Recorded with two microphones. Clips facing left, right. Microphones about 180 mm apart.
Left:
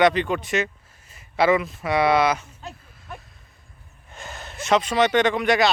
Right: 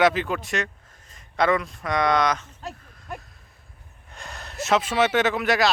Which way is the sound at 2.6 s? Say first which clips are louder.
Right 2 dB; centre (ahead or behind).